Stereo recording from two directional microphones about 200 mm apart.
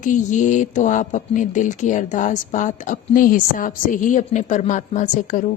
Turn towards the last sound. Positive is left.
turn(degrees=40)  # may be behind; listen again after turning